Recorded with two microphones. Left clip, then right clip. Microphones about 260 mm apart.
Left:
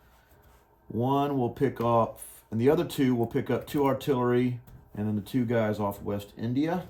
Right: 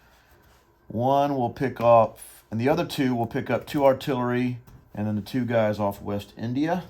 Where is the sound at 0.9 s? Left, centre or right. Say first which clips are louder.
Right 5 dB; right.